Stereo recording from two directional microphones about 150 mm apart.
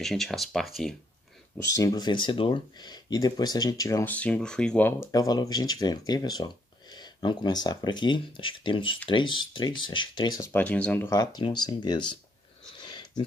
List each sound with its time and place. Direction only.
0.0 s speech: centre (ahead or behind)
1.6 s speech: 25° left (ahead or behind)
5.1 s speech: 25° left (ahead or behind)
10.5 s speech: 10° left (ahead or behind)
11.1 s speech: 30° left (ahead or behind)